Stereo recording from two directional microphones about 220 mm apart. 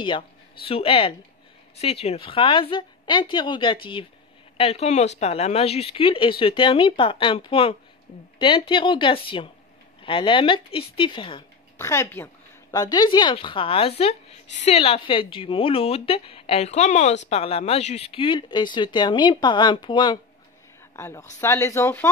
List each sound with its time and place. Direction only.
0.7 s speech: 25° left (ahead or behind)